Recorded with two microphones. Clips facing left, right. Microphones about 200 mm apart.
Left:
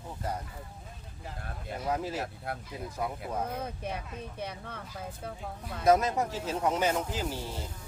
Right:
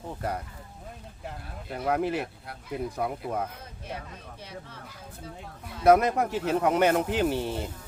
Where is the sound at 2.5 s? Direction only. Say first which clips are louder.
Right 4 dB; 55° left (ahead or behind).